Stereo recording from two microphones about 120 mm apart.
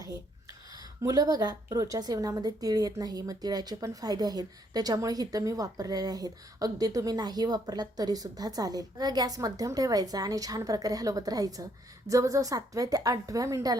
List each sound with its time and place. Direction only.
1.0 s a woman's voice: 30° right (ahead or behind)